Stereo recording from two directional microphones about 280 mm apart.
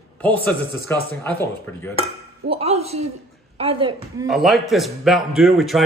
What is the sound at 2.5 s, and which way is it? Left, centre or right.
A woman's voice, right.